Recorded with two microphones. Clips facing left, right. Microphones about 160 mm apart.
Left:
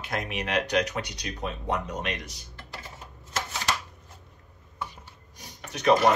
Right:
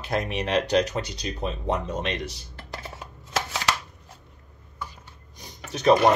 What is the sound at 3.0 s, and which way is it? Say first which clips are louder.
Shuffling cards: right 5 dB; 80° right.